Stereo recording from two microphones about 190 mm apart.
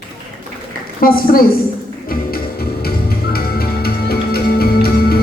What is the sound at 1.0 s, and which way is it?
Speech, 50° left (ahead or behind).